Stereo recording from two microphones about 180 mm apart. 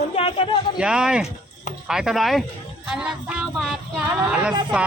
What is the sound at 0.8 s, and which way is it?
Speech, 5° right (ahead or behind).